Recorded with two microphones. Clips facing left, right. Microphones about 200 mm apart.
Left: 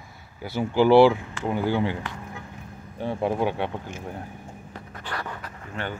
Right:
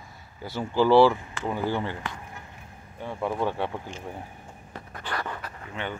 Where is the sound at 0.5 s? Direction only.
25° left (ahead or behind).